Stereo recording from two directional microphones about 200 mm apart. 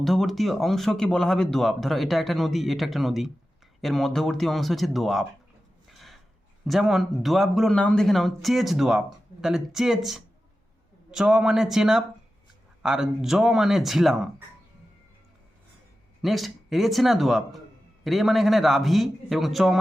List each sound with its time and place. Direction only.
0.0 s speech: centre (ahead or behind)
5.9 s gasp: centre (ahead or behind)
6.7 s speech: centre (ahead or behind)
16.2 s speech: centre (ahead or behind)